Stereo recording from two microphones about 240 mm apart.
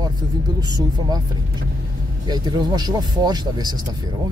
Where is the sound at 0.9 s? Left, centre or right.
Centre.